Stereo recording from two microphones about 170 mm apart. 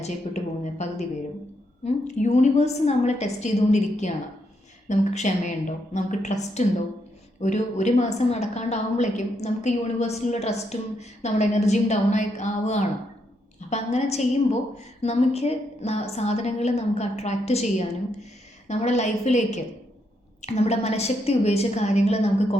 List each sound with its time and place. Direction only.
0.0 s a woman's voice: 40° left (ahead or behind)